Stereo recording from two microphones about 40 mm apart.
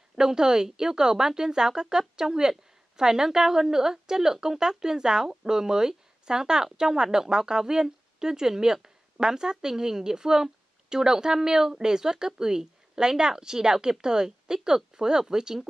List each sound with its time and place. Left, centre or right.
0.1 s a woman's voice: centre